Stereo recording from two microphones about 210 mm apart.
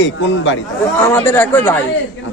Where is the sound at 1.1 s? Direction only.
10° left (ahead or behind).